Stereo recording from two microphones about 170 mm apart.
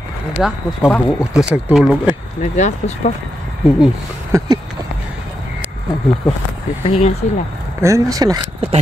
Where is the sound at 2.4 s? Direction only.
45° left (ahead or behind).